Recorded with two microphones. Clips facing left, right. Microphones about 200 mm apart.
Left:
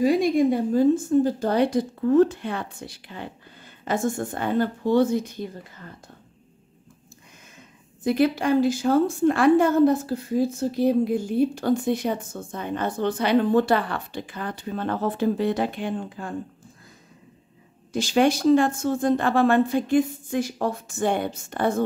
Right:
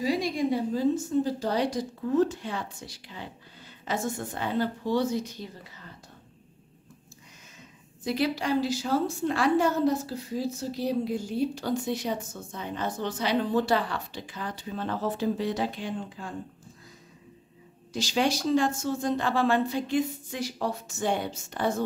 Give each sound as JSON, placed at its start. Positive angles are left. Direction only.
{"t": 0.0, "sound": "a woman's voice", "side_deg": 55}
{"t": 8.0, "sound": "a woman's voice", "side_deg": 55}
{"t": 17.9, "sound": "a woman's voice", "side_deg": 55}